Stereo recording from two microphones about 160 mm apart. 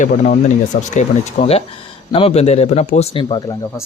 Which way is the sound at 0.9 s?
40° left (ahead or behind).